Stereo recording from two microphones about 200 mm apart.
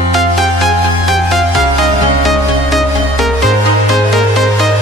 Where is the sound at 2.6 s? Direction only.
Centre (ahead or behind).